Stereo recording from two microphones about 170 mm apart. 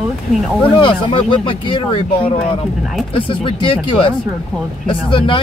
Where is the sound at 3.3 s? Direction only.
30° left (ahead or behind).